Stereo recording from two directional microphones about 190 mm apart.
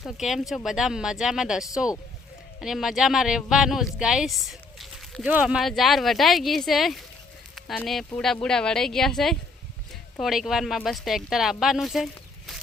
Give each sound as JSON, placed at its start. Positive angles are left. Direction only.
{"t": 0.0, "sound": "speech", "side_deg": 0}